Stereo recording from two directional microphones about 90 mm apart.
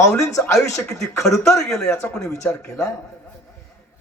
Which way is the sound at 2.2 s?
35° left (ahead or behind).